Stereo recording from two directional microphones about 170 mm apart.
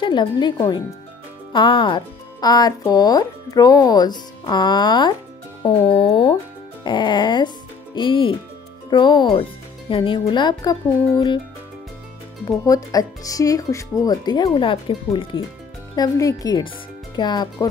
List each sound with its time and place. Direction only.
0.0 s speech: 25° left (ahead or behind)
12.4 s speech: 20° left (ahead or behind)